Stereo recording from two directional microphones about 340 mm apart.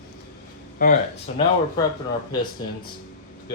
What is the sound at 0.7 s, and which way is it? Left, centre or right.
Speech, left.